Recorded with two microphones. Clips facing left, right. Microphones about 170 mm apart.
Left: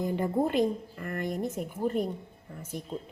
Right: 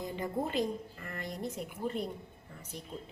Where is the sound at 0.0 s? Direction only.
55° left (ahead or behind).